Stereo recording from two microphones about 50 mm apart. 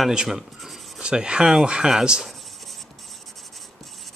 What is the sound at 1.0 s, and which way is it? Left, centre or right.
Speech, centre.